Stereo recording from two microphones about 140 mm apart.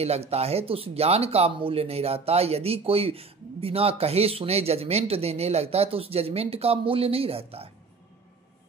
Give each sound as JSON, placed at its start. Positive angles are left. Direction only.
{"t": 0.0, "sound": "speech", "side_deg": -50}